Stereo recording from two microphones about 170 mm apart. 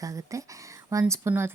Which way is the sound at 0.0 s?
20° right (ahead or behind).